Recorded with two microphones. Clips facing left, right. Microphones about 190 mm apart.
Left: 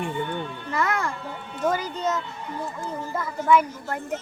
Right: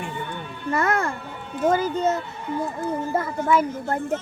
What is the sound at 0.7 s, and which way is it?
Music, 50° right (ahead or behind).